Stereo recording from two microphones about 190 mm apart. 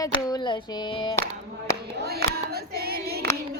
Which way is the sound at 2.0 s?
55° right (ahead or behind).